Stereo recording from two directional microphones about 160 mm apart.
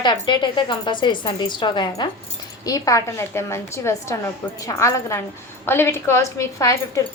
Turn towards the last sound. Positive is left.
turn(degrees=20)  # may be behind; listen again after turning